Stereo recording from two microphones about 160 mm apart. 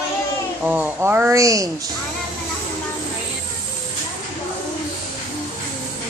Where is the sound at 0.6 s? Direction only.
10° right (ahead or behind).